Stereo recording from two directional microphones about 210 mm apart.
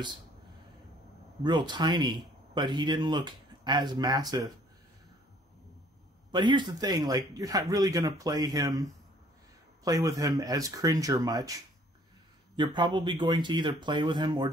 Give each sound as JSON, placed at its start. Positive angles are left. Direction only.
{"t": 1.4, "sound": "speech", "side_deg": -20}
{"t": 6.3, "sound": "speech", "side_deg": -20}
{"t": 9.8, "sound": "speech", "side_deg": -15}
{"t": 12.5, "sound": "speech", "side_deg": -20}